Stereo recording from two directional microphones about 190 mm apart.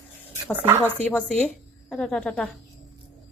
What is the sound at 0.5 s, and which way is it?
Speech, 10° right (ahead or behind).